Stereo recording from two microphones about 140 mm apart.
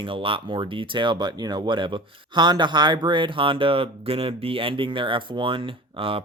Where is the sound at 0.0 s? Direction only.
40° right (ahead or behind).